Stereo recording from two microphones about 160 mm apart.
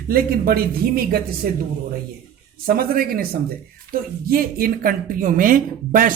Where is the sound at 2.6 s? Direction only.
65° right (ahead or behind).